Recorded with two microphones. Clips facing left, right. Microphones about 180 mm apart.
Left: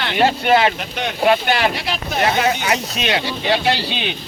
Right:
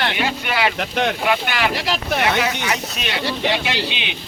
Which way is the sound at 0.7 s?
85° right.